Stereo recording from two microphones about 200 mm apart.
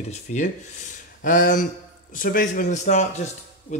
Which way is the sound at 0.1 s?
35° left (ahead or behind).